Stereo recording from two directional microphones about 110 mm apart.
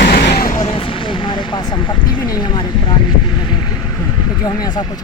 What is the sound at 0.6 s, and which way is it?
Speech, 55° left (ahead or behind).